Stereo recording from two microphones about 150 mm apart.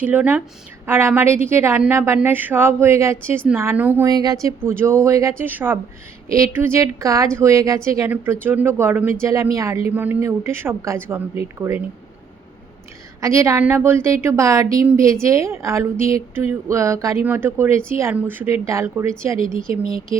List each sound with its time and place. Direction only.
0.0 s a woman's voice: 10° right (ahead or behind)
4.1 s a woman's voice: 25° right (ahead or behind)
13.2 s a woman's voice: 20° right (ahead or behind)
19.6 s speech: 70° right (ahead or behind)